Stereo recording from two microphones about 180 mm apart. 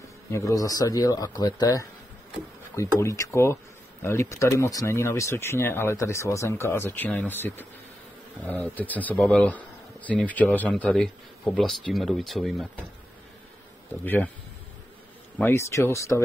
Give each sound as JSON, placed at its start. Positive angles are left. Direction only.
{"t": 0.3, "sound": "speech", "side_deg": 20}
{"t": 14.0, "sound": "speech", "side_deg": 10}
{"t": 15.3, "sound": "speech", "side_deg": 15}